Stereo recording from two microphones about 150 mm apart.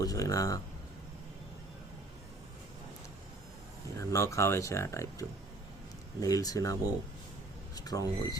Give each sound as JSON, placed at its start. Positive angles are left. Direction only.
{"t": 0.0, "sound": "speech", "side_deg": 25}
{"t": 4.1, "sound": "speech", "side_deg": 20}
{"t": 6.2, "sound": "speech", "side_deg": 25}